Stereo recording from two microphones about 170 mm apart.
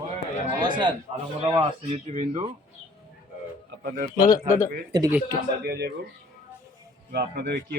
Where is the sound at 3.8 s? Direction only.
60° right (ahead or behind).